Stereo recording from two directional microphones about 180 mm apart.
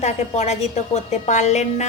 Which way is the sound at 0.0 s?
40° left (ahead or behind).